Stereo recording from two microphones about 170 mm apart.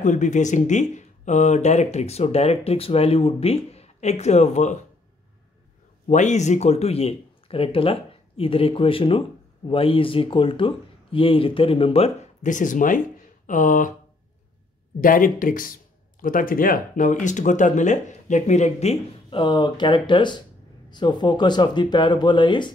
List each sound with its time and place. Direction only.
0.0 s speech: 45° left (ahead or behind)
6.0 s speech: 45° left (ahead or behind)
15.0 s speech: 55° left (ahead or behind); by 22.7 s 25° left (ahead or behind)